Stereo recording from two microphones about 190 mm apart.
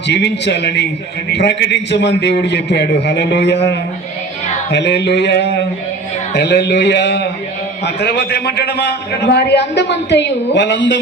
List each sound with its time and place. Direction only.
0.1 s a man's voice: 65° left (ahead or behind)